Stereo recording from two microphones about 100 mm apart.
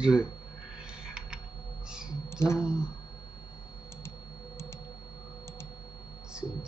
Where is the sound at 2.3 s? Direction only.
30° left (ahead or behind).